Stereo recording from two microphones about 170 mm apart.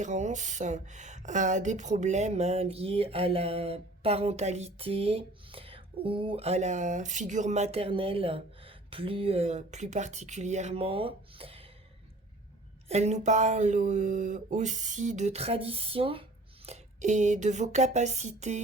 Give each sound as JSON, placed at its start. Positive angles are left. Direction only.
{"t": 0.0, "sound": "speech", "side_deg": -45}
{"t": 12.9, "sound": "speech", "side_deg": -40}